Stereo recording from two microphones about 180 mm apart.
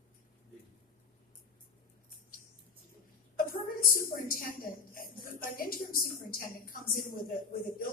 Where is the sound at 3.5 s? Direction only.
55° left (ahead or behind).